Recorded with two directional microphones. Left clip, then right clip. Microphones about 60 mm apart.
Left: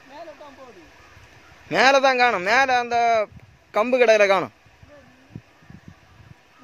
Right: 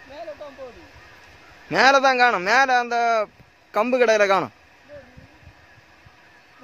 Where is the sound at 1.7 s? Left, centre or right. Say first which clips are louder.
Even; centre.